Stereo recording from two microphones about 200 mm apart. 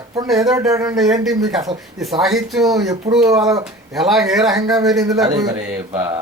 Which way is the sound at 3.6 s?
Centre (ahead or behind).